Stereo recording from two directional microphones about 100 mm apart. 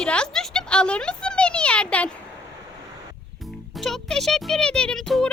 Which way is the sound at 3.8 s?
5° left (ahead or behind).